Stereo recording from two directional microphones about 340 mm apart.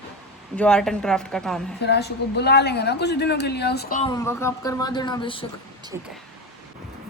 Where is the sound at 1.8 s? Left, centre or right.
Left.